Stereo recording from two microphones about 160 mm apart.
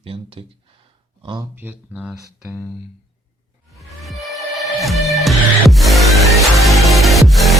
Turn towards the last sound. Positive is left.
turn(degrees=0)  # may be behind; listen again after turning